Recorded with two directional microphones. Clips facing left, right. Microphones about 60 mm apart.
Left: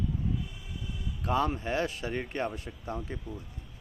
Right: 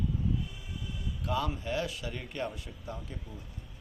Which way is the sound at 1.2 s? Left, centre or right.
Left.